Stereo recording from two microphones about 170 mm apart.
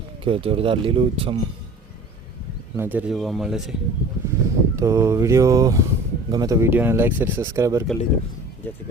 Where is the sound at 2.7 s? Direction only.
10° right (ahead or behind).